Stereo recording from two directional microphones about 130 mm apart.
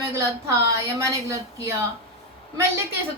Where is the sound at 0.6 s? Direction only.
25° right (ahead or behind).